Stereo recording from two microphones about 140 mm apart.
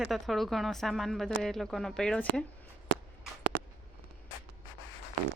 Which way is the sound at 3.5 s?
15° left (ahead or behind).